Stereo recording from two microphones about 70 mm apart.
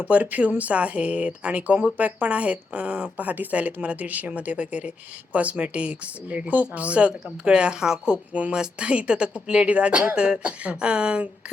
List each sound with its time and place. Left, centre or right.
0.0 s speech: right